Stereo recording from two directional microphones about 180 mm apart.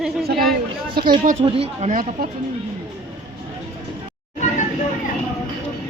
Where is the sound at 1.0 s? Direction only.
60° right (ahead or behind).